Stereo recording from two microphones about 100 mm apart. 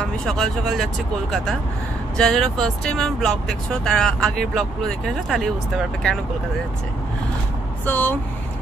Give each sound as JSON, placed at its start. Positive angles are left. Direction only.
{"t": 0.0, "sound": "speech", "side_deg": 5}
{"t": 2.1, "sound": "speech", "side_deg": 5}
{"t": 7.8, "sound": "speech", "side_deg": 15}